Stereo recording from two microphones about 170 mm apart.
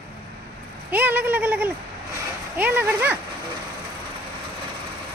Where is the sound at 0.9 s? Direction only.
10° right (ahead or behind).